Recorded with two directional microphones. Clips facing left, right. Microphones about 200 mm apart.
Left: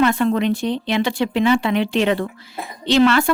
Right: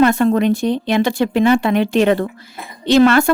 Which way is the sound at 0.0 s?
45° right (ahead or behind).